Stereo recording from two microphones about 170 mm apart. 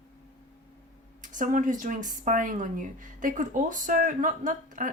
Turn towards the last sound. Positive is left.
turn(degrees=-50)  # may be behind; listen again after turning